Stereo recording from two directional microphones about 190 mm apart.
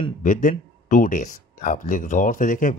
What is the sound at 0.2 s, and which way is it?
Speech, 40° left (ahead or behind).